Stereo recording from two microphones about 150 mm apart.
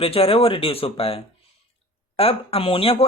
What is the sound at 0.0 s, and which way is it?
Speech, 40° left (ahead or behind).